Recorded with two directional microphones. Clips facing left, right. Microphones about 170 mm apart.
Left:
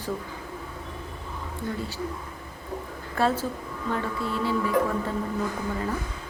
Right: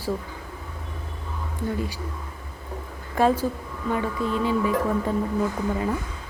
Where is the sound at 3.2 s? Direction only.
15° right (ahead or behind).